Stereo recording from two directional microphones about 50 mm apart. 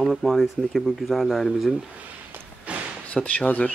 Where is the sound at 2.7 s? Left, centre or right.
Right.